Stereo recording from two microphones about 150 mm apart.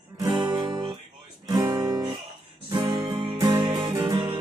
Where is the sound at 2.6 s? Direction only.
25° right (ahead or behind).